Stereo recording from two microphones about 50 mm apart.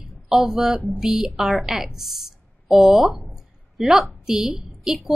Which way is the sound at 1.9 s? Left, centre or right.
Centre.